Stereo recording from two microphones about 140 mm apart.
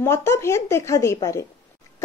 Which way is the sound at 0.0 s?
20° left (ahead or behind).